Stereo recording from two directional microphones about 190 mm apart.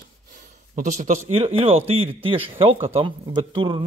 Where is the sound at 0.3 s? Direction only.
45° right (ahead or behind).